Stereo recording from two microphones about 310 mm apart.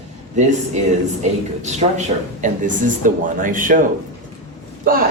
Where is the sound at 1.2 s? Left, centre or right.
Right.